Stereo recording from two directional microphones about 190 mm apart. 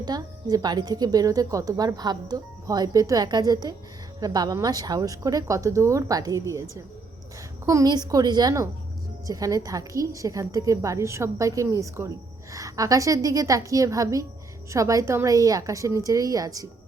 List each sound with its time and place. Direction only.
0.0 s a woman's voice: 20° right (ahead or behind)